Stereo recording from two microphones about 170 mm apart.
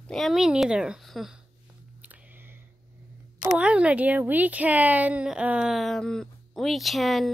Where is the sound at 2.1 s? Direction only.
10° right (ahead or behind).